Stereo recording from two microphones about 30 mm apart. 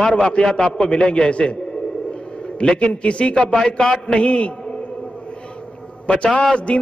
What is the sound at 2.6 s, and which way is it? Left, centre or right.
A man's voice, left.